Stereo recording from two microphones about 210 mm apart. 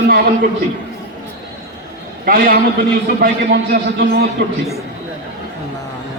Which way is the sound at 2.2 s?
45° right (ahead or behind).